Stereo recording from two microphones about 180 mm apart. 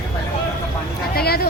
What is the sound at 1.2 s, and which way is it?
Speech, 60° left (ahead or behind).